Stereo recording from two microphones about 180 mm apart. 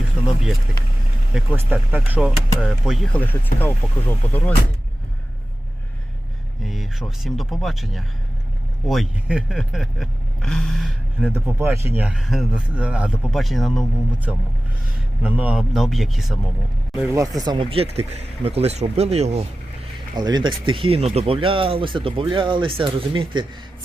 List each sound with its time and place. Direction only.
1.3 s speech: 5° right (ahead or behind); by 4.5 s 10° left (ahead or behind)
6.6 s speech: centre (ahead or behind)
11.3 s speech: 15° right (ahead or behind)
17.0 s speech: 15° right (ahead or behind); by 19.5 s 35° right (ahead or behind)
20.1 s speech: 25° right (ahead or behind)